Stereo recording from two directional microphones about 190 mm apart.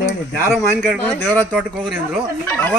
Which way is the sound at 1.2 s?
10° left (ahead or behind).